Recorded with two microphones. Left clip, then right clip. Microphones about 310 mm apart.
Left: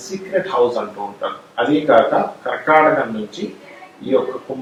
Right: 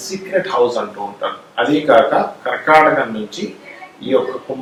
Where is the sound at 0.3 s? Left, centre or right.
Centre.